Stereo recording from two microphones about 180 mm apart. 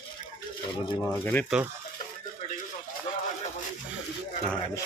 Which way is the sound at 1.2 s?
10° left (ahead or behind).